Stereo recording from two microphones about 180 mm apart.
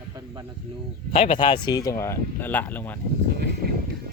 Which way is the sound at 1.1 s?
30° left (ahead or behind).